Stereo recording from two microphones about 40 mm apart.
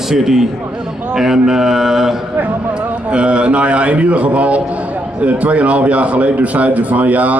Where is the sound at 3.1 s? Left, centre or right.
Right.